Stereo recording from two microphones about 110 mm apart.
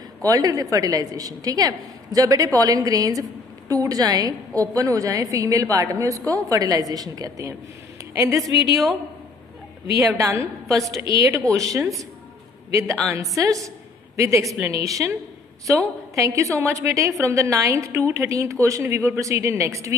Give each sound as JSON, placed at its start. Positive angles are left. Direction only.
{"t": 0.2, "sound": "a woman's voice", "side_deg": -35}
{"t": 9.9, "sound": "a woman's voice", "side_deg": -25}
{"t": 13.1, "sound": "a woman's voice", "side_deg": -30}
{"t": 16.2, "sound": "a woman's voice", "side_deg": -25}